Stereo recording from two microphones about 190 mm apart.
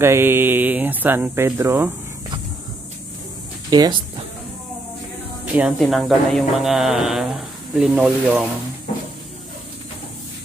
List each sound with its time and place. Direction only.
0.0 s speech: 15° right (ahead or behind)
3.7 s speech: 20° right (ahead or behind)
5.6 s speech: centre (ahead or behind)